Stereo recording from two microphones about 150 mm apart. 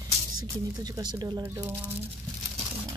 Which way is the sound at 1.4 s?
15° right (ahead or behind).